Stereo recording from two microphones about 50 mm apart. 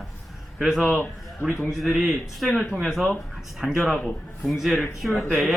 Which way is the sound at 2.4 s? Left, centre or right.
Centre.